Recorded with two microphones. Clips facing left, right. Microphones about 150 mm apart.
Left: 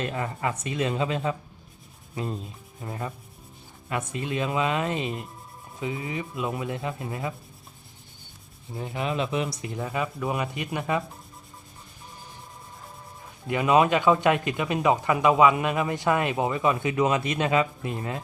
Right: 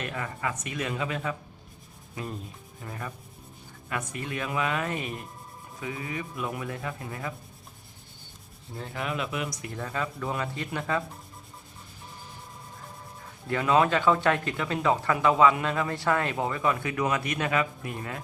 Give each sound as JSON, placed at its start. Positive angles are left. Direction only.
{"t": 0.0, "sound": "rub", "side_deg": 25}
{"t": 8.7, "sound": "speech", "side_deg": 20}
{"t": 13.5, "sound": "speech", "side_deg": 20}